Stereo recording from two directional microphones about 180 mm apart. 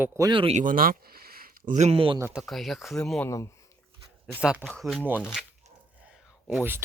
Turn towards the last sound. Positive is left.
turn(degrees=0)  # may be behind; listen again after turning